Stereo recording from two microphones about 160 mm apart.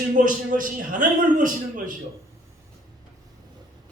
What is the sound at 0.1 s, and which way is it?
A man's voice, 55° right (ahead or behind).